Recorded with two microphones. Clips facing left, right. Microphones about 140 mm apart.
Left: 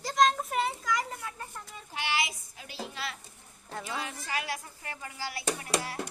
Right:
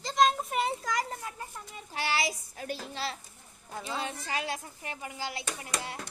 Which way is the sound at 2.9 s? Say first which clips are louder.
Right 3 dB; 30° right (ahead or behind).